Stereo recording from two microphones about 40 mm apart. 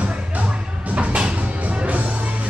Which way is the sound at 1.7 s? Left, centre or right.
Right.